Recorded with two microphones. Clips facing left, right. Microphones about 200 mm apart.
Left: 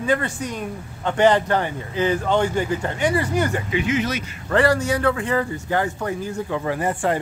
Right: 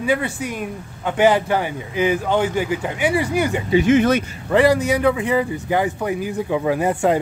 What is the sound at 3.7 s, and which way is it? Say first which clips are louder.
Speech: right 11 dB; 50° right (ahead or behind).